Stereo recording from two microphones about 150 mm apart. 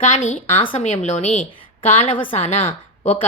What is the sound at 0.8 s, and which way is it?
A woman's voice, 50° left (ahead or behind).